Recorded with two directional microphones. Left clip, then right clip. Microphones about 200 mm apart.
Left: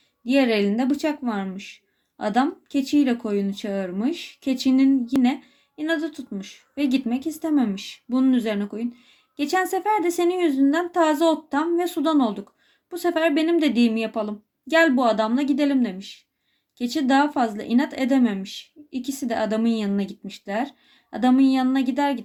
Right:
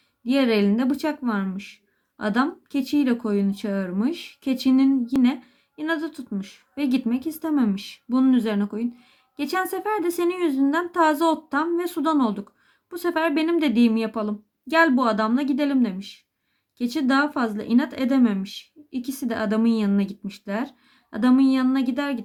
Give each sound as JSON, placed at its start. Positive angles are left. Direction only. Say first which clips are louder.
{"t": 0.3, "sound": "speech", "louder": "left 1 dB", "side_deg": -20}